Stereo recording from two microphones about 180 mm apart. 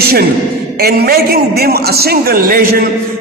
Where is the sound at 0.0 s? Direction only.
60° right (ahead or behind).